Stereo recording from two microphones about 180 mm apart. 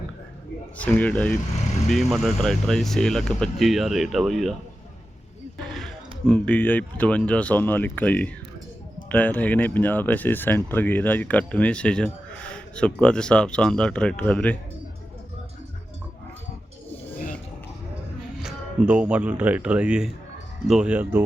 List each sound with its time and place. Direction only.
0.8 s speech: 10° left (ahead or behind)
5.8 s speech: 5° left (ahead or behind)
18.4 s speech: 5° right (ahead or behind)